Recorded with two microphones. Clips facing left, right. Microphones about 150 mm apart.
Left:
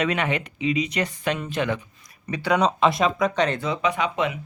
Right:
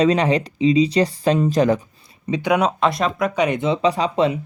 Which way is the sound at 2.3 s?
15° right (ahead or behind).